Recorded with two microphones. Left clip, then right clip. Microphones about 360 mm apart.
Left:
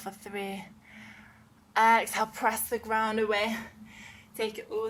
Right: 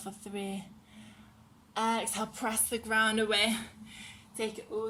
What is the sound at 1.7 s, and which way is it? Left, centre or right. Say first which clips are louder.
A woman's voice: left 9 dB; left.